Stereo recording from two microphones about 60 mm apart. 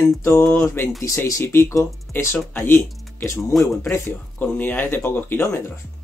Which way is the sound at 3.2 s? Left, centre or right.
Left.